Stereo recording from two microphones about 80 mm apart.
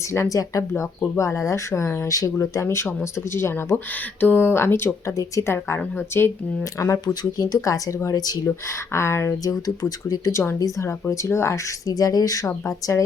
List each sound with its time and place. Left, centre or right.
0.1 s speech: left
6.7 s speech: left
7.0 s speech: left
8.4 s speech: left
9.4 s speech: left
11.9 s speech: left